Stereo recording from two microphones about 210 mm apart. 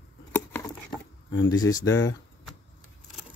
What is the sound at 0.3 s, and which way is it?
Patter, 10° left (ahead or behind).